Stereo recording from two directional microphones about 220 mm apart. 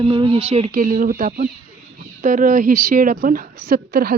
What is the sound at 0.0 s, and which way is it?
Speech, 25° right (ahead or behind).